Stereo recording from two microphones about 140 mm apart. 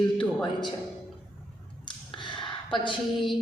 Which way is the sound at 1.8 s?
35° left (ahead or behind).